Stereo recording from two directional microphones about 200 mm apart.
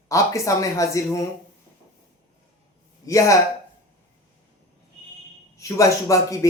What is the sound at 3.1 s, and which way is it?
Speech, 15° left (ahead or behind).